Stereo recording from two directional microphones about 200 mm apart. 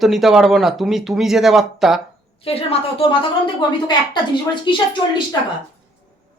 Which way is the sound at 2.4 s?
30° left (ahead or behind).